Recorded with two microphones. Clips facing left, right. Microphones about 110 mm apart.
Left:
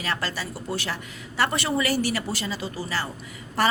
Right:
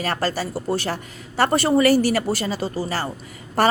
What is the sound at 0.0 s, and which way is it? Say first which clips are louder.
A woman's voice: right 6 dB; 40° right (ahead or behind).